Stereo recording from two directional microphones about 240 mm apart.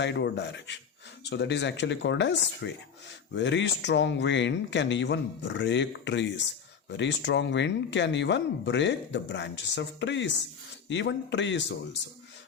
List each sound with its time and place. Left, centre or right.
0.0 s speech: left